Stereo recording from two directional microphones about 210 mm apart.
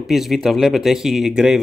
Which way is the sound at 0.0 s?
Centre (ahead or behind).